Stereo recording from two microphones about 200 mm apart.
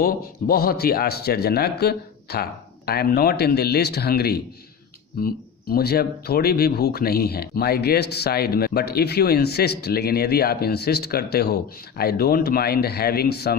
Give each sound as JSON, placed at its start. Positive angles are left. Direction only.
{"t": 0.0, "sound": "speech", "side_deg": 50}